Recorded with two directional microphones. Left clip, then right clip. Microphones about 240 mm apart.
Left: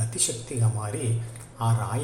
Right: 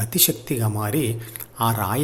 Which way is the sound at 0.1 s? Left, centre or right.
Right.